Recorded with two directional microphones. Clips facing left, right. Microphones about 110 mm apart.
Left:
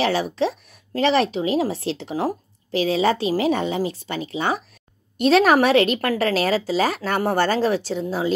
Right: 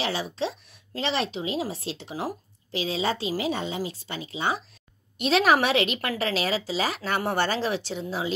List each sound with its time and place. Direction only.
0.0 s speech: 60° left (ahead or behind)
5.1 s a woman's voice: 45° left (ahead or behind)